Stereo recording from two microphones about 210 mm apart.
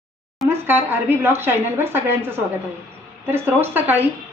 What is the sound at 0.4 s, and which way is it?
Speech, 10° right (ahead or behind).